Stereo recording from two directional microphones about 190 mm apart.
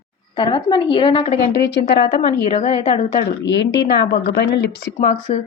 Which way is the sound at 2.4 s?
35° left (ahead or behind).